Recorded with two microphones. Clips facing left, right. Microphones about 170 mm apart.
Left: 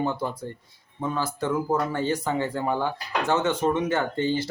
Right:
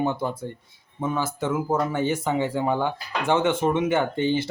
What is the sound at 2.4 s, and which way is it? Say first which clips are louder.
Speech: right 2 dB; 20° right (ahead or behind).